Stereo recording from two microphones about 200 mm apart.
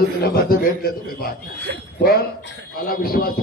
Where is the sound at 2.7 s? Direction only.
45° left (ahead or behind).